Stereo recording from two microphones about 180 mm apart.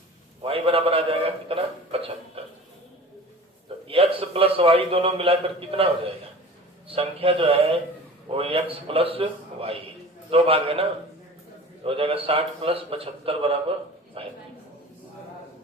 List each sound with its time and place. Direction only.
0.4 s a man's voice: 30° right (ahead or behind)
3.8 s a man's voice: 30° right (ahead or behind)